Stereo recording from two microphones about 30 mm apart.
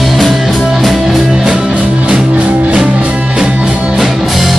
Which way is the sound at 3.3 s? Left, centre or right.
Right.